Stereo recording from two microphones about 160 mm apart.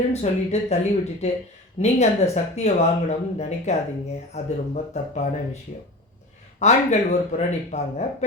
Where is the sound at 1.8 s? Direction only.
45° left (ahead or behind).